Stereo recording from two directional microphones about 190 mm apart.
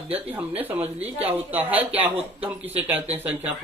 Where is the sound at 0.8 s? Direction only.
35° right (ahead or behind).